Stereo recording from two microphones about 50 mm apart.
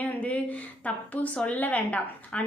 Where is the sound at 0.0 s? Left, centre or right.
Left.